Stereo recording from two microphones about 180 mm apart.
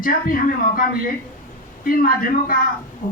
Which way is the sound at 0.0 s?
50° left (ahead or behind).